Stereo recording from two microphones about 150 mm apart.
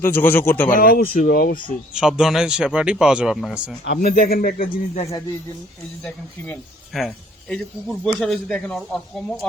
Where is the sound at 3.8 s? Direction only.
80° left.